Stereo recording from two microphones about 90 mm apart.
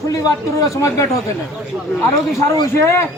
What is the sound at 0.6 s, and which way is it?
Speech, 35° left (ahead or behind).